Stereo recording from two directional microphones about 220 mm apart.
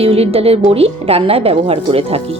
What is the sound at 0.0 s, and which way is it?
Speech, 25° right (ahead or behind).